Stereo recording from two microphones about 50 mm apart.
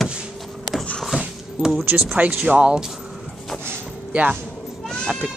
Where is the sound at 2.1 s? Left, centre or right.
Right.